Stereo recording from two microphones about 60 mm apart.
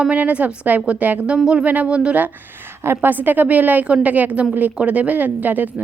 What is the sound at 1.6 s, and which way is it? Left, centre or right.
Speech, right.